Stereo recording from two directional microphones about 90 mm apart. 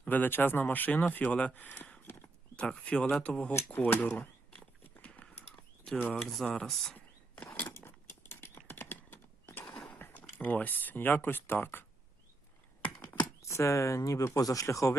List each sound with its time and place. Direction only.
0.0 s speech: 20° left (ahead or behind)
2.6 s speech: 10° left (ahead or behind)
5.8 s speech: 15° left (ahead or behind)
6.9 s a sound: 15° left (ahead or behind)
7.8 s clip-clop: 25° left (ahead or behind)
9.6 s horse: 10° left (ahead or behind)
10.0 s speech: 25° left (ahead or behind)
13.4 s speech: 35° left (ahead or behind)